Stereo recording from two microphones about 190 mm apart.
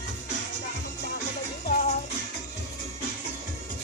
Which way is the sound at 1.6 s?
50° left (ahead or behind).